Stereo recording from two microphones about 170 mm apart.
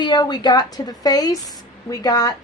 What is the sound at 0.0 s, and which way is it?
A woman's voice, 25° left (ahead or behind).